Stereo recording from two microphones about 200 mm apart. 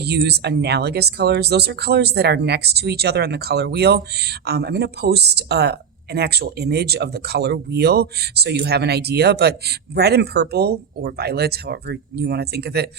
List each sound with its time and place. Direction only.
0.0 s speech: 55° right (ahead or behind)